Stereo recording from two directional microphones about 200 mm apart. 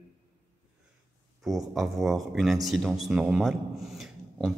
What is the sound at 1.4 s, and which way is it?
Speech, centre (ahead or behind).